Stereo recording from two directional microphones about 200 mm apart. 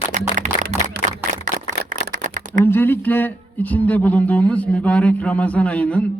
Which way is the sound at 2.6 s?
10° left (ahead or behind).